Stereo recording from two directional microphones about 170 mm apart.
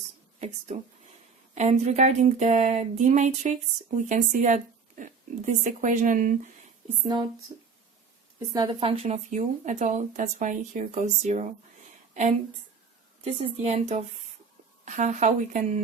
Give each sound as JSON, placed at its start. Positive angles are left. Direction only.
{"t": 0.3, "sound": "speech", "side_deg": -40}
{"t": 8.5, "sound": "speech", "side_deg": -30}
{"t": 13.2, "sound": "speech", "side_deg": -35}